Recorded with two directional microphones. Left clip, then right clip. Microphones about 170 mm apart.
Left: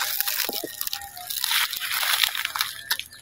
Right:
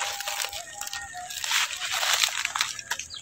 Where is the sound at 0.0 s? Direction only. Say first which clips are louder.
Left 2 dB; 45° left (ahead or behind).